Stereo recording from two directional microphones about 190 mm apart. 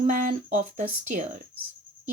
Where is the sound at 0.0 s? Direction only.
45° right (ahead or behind).